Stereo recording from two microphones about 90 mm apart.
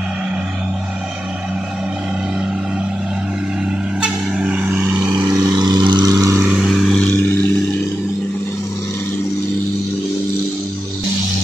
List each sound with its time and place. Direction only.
4.0 s vehicle: 10° right (ahead or behind)
5.3 s vehicle: 50° right (ahead or behind)
6.7 s vehicle: centre (ahead or behind)
7.0 s vehicle: 25° left (ahead or behind)